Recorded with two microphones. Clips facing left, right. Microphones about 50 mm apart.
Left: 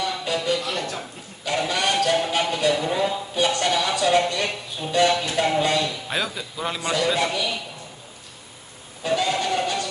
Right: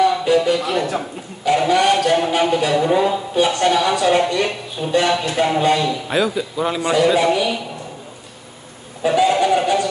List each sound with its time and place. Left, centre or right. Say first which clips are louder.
0.0 s music: right 10 dB; centre
4.9 s speech: right 3 dB; centre
9.0 s a sound: right 8 dB; centre